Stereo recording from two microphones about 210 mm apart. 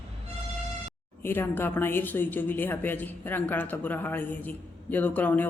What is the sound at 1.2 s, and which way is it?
Speech, 10° left (ahead or behind).